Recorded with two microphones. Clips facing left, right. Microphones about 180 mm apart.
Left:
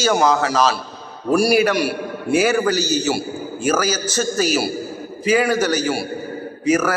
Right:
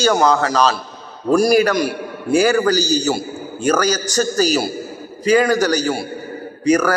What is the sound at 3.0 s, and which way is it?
Speech, 5° left (ahead or behind).